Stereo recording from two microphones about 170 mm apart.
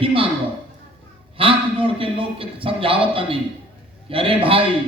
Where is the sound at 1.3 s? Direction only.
30° right (ahead or behind).